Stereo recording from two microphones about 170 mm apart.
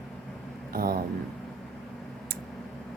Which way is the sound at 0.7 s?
60° right (ahead or behind).